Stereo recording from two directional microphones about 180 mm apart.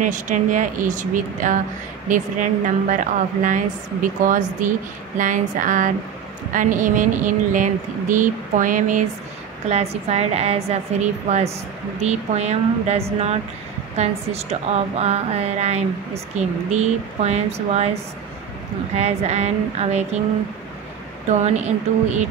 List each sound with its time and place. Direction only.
0.0 s a woman's voice: 45° right (ahead or behind)
18.9 s a woman's voice: 40° right (ahead or behind)
21.3 s a woman's voice: 40° right (ahead or behind)